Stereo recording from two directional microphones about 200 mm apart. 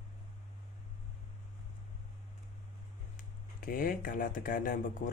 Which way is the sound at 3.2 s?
45° left (ahead or behind).